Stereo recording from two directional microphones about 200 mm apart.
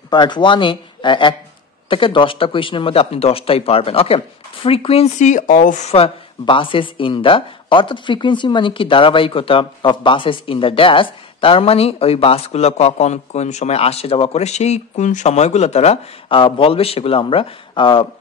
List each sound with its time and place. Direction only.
0.1 s speech: 20° left (ahead or behind)